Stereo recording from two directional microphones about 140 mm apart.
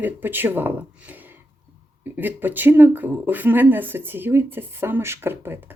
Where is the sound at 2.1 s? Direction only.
15° right (ahead or behind).